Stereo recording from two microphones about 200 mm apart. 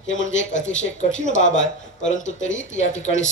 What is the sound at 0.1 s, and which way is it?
Speech, 70° left (ahead or behind).